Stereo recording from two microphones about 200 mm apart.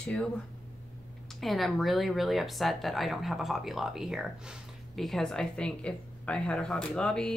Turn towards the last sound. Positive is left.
turn(degrees=5)  # may be behind; listen again after turning